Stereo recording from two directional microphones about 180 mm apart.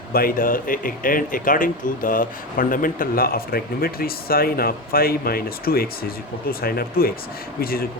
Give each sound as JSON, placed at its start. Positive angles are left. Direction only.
{"t": 0.1, "sound": "speech", "side_deg": 55}